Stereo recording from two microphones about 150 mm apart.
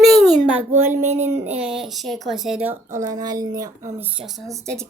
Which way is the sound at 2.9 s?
25° right (ahead or behind).